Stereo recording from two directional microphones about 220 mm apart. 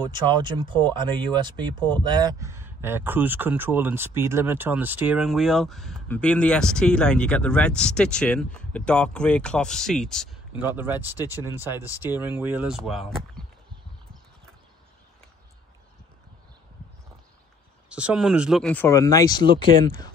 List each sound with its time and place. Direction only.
0.1 s speech: 20° right (ahead or behind); by 10.3 s centre (ahead or behind)
10.8 s speech: 10° right (ahead or behind)
13.4 s a sound: centre (ahead or behind)
17.8 s speech: 5° right (ahead or behind); by 20.1 s 20° left (ahead or behind)